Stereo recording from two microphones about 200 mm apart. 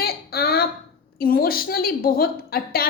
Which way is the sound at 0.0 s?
50° left (ahead or behind).